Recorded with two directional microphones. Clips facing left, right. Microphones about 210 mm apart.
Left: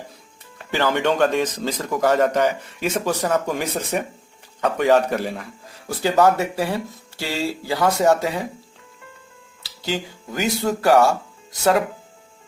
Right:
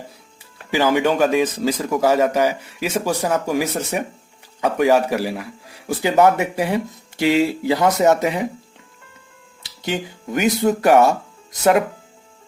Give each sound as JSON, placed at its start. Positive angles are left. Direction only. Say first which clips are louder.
{"t": 0.7, "sound": "speech", "louder": "right 3 dB", "side_deg": -10}
{"t": 9.6, "sound": "speech", "louder": "right 2 dB", "side_deg": -20}